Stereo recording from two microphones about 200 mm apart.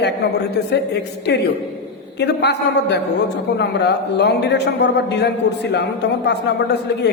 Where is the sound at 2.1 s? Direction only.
55° left (ahead or behind).